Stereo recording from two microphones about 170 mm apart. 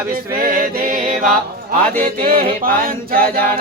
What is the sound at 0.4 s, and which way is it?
Music, 55° right (ahead or behind).